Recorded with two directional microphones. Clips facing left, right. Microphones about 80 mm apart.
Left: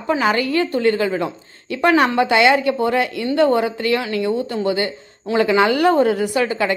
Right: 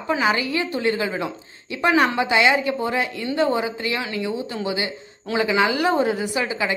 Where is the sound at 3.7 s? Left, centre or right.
Left.